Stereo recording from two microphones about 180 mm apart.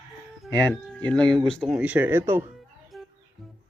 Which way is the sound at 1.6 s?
10° right (ahead or behind).